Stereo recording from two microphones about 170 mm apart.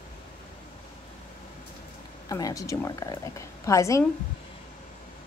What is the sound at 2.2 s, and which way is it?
A woman's voice, 20° left (ahead or behind).